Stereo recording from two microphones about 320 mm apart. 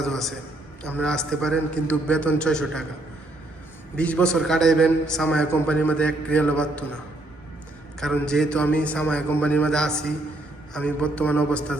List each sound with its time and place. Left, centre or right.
0.0 s a man's voice: centre
3.9 s a man's voice: centre
7.9 s a man's voice: centre